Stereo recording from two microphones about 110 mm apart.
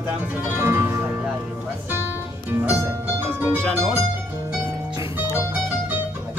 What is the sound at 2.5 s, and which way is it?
Music, 20° right (ahead or behind).